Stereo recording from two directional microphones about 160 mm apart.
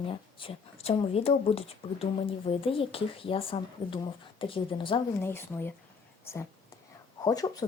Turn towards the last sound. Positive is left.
turn(degrees=25)  # may be behind; listen again after turning